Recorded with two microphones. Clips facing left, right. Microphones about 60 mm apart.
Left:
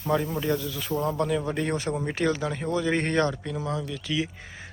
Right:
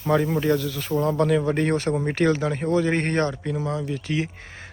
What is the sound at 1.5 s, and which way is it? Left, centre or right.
Speech, right.